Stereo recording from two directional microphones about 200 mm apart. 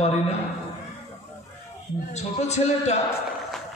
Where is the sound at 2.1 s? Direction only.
35° left (ahead or behind).